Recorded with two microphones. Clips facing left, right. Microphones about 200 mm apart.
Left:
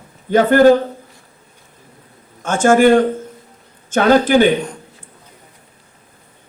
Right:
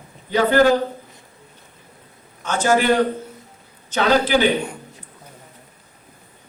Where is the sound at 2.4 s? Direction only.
50° left (ahead or behind).